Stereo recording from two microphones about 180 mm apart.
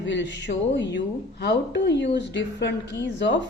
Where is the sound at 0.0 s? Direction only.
85° left.